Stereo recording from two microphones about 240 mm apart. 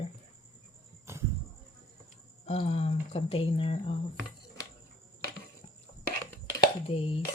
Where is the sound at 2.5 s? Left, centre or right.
Left.